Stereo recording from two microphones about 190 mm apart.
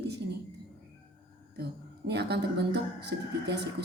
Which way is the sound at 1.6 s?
60° right (ahead or behind).